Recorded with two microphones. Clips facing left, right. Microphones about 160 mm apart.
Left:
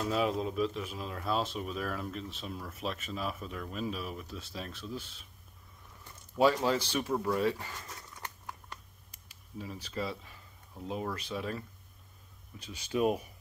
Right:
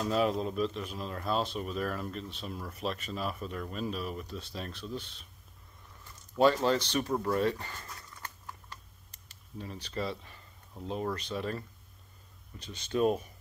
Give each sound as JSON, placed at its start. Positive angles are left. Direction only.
{"t": 0.0, "sound": "speech", "side_deg": 0}
{"t": 6.3, "sound": "speech", "side_deg": 5}
{"t": 9.3, "sound": "speech", "side_deg": 5}